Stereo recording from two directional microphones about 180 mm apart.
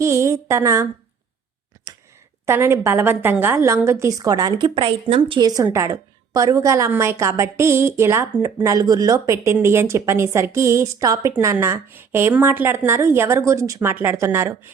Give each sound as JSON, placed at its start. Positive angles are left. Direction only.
{"t": 0.0, "sound": "a woman's voice", "side_deg": -15}
{"t": 1.9, "sound": "a sound", "side_deg": -20}
{"t": 2.5, "sound": "a woman's voice", "side_deg": -15}